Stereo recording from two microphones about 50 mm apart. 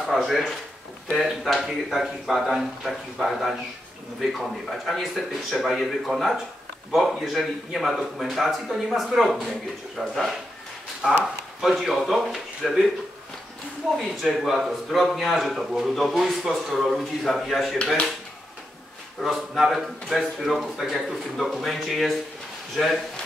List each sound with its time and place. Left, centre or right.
0.0 s speech: centre
11.0 s speech: centre
11.6 s speech: centre
13.9 s speech: centre
19.2 s speech: centre